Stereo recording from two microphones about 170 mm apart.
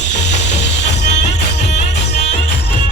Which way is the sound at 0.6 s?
90° left.